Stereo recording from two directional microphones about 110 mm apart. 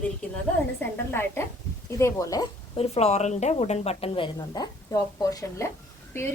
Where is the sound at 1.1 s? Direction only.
20° left (ahead or behind).